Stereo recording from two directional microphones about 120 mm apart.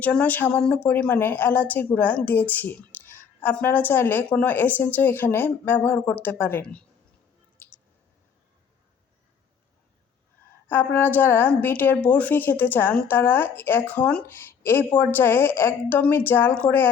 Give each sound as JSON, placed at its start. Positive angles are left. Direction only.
{"t": 0.0, "sound": "a woman's voice", "side_deg": 10}
{"t": 7.6, "sound": "clicking", "side_deg": 15}
{"t": 10.7, "sound": "a woman's voice", "side_deg": 15}